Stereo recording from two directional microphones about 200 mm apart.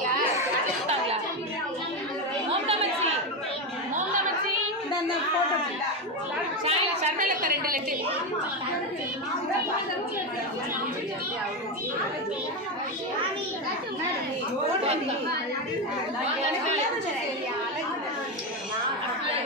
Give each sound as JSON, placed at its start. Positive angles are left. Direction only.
{"t": 6.6, "sound": "a woman's voice", "side_deg": -30}